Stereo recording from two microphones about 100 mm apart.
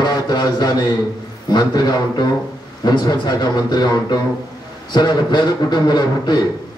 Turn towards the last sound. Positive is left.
turn(degrees=45)  # may be behind; listen again after turning